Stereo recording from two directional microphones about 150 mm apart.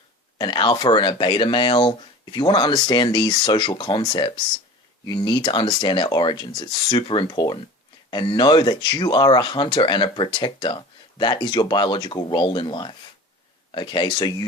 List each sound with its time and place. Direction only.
0.3 s speech: 30° left (ahead or behind)